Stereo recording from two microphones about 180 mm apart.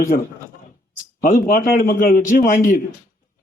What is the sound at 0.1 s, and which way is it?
Speech, 50° left (ahead or behind).